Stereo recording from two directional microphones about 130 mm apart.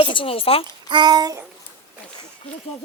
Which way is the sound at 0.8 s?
35° right (ahead or behind).